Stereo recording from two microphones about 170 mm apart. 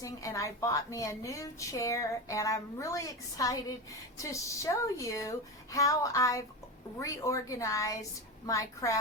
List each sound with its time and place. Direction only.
0.0 s a woman's voice: 20° left (ahead or behind)